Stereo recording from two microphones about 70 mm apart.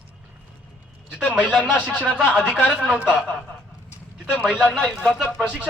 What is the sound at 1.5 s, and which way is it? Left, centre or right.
Speech, centre.